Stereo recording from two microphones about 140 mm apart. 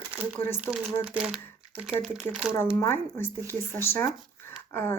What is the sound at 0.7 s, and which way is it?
Speech, 15° left (ahead or behind).